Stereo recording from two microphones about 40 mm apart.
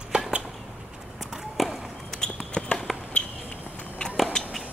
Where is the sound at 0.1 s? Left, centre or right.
Right.